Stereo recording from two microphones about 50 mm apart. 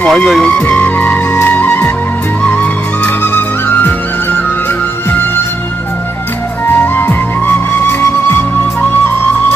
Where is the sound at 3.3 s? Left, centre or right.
Left.